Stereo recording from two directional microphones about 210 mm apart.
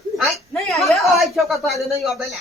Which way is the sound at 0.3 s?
Centre (ahead or behind).